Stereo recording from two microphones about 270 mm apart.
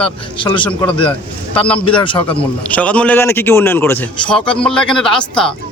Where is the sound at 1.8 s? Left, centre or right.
Centre.